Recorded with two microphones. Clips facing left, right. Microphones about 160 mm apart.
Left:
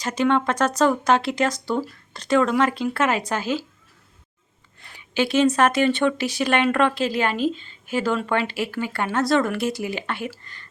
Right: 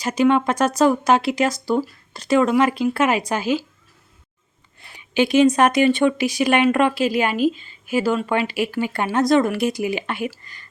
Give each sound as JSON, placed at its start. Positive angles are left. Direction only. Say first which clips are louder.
{"t": 0.0, "sound": "speech", "louder": "right 3 dB", "side_deg": -10}
{"t": 4.8, "sound": "speech", "louder": "right 4 dB", "side_deg": -15}